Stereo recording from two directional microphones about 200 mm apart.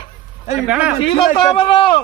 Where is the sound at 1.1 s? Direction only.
25° left (ahead or behind).